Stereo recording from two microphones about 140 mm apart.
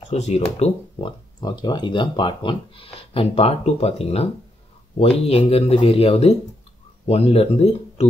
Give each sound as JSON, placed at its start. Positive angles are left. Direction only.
{"t": 0.1, "sound": "speech", "side_deg": 50}
{"t": 1.4, "sound": "speech", "side_deg": 30}